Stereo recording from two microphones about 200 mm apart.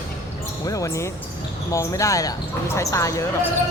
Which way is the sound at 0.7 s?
15° left (ahead or behind).